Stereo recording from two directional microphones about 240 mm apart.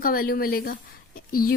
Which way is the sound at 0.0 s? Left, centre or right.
Left.